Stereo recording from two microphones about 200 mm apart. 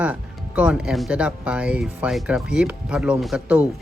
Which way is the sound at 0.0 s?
5° right (ahead or behind).